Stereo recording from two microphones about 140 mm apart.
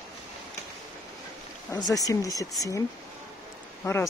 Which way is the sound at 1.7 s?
25° left (ahead or behind).